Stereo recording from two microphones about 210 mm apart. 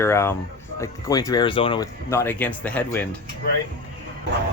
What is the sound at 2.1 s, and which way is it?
Speech, 10° left (ahead or behind).